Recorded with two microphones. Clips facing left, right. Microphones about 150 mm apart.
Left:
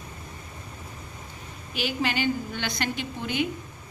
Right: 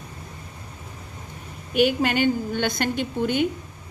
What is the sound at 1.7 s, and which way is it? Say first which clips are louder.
A woman's voice: right 8 dB; 50° right (ahead or behind).